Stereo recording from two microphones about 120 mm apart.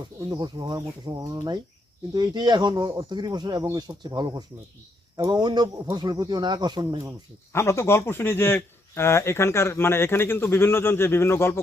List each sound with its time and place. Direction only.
0.3 s speech: 35° right (ahead or behind)
7.5 s a man's voice: 25° left (ahead or behind)